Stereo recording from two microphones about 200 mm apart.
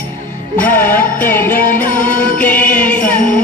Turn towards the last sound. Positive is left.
turn(degrees=45)  # may be behind; listen again after turning